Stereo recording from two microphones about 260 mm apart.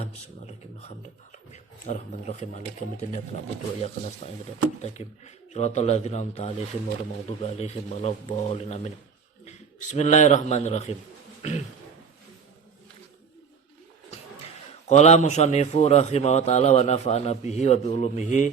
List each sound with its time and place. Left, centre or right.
0.0 s a man's voice: left
14.8 s a man's voice: left